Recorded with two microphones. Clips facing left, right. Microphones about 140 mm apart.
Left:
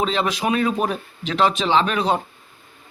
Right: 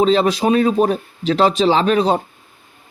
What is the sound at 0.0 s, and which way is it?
A man's voice, 35° right (ahead or behind).